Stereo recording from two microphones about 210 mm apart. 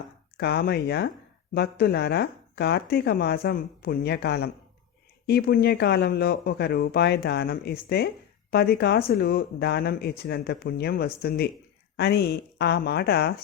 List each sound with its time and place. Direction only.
0.3 s speech: 50° left (ahead or behind)